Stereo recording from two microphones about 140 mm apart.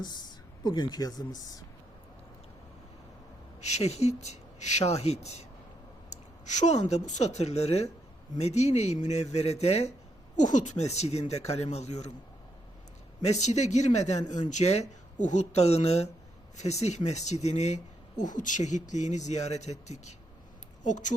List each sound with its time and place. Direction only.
0.0 s speech: 30° left (ahead or behind)
3.6 s speech: 50° left (ahead or behind)
6.1 s a sound: 60° left (ahead or behind)
6.9 s speech: 55° left (ahead or behind)
10.3 s speech: 60° left (ahead or behind)
13.2 s speech: 55° left (ahead or behind)
18.2 s speech: 65° left (ahead or behind)
20.8 s speech: 65° left (ahead or behind)